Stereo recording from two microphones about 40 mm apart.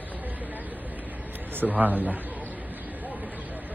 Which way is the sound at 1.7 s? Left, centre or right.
Right.